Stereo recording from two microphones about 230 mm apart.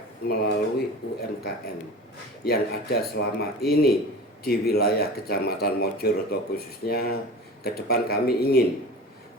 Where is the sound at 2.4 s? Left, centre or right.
Left.